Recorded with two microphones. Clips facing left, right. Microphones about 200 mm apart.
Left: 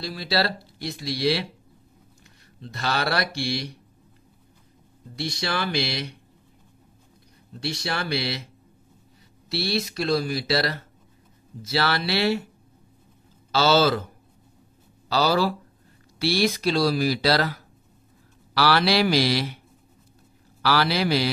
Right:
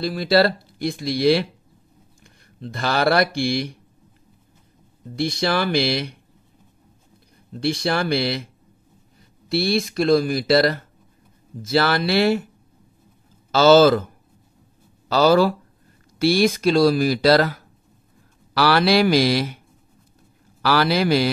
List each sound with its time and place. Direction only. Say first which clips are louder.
0.0 s speech: right 8 dB; 50° right (ahead or behind)
5.1 s speech: right 7 dB; 50° right (ahead or behind)
7.6 s speech: right 8 dB; 55° right (ahead or behind)
9.5 s speech: right 6 dB; 50° right (ahead or behind)
13.5 s speech: right 7 dB; 50° right (ahead or behind)
15.0 s speech: right 6 dB; 50° right (ahead or behind)
20.6 s speech: right 4 dB; 50° right (ahead or behind)